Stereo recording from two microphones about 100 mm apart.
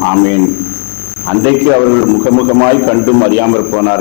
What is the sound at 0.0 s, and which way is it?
Speech, 25° left (ahead or behind).